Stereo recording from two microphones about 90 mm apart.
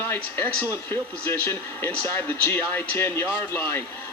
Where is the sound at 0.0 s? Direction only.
25° left (ahead or behind).